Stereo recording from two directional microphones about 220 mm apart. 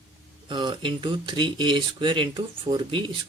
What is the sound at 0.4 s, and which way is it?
Speech, 20° right (ahead or behind).